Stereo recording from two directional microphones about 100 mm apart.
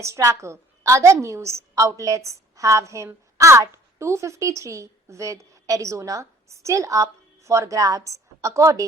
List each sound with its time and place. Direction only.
0.0 s a woman's voice: 30° right (ahead or behind)